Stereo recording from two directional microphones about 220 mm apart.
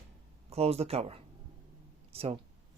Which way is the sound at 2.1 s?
25° right (ahead or behind).